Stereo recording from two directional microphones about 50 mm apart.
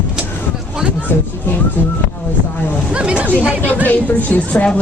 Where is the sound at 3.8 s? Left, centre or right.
Left.